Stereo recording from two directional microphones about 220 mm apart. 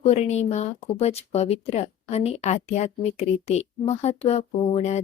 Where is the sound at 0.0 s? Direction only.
30° left (ahead or behind).